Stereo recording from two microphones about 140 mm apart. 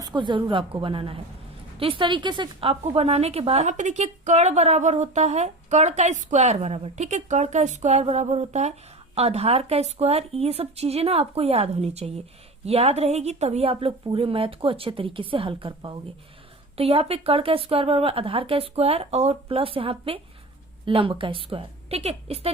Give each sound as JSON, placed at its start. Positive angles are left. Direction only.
{"t": 0.0, "sound": "a woman's voice", "side_deg": -30}